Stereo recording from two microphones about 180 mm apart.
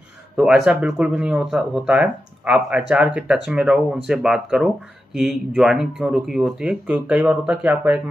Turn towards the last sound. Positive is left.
turn(degrees=-10)  # may be behind; listen again after turning